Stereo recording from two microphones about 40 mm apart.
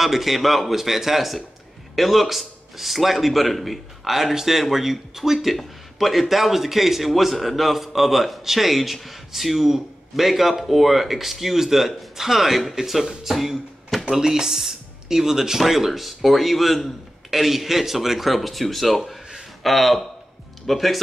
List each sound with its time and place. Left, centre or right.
0.0 s a man's voice: centre